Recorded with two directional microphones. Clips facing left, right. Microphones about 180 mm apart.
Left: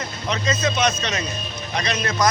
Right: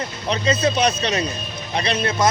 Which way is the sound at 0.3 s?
35° right (ahead or behind).